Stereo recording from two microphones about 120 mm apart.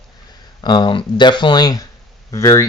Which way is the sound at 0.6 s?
40° left (ahead or behind).